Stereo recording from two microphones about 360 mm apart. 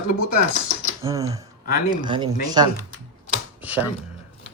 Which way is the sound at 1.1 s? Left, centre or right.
Centre.